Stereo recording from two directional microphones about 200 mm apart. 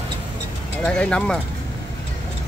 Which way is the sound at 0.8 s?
5° left (ahead or behind).